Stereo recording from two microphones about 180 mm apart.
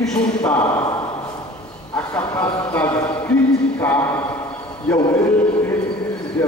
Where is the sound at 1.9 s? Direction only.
10° left (ahead or behind).